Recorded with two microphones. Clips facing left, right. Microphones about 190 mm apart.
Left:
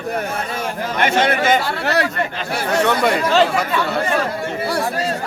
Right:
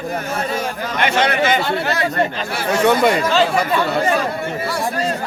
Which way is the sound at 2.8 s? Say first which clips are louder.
Right 4 dB; 5° right (ahead or behind).